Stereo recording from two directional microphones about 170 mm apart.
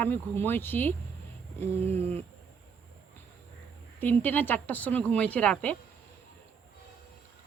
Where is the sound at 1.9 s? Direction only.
35° right (ahead or behind).